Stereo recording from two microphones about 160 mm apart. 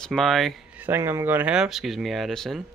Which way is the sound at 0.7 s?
15° right (ahead or behind).